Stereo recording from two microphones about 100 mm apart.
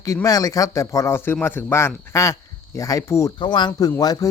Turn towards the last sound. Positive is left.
turn(degrees=40)  # may be behind; listen again after turning